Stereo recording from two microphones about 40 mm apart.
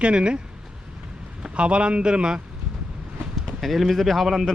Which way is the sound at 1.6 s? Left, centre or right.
Right.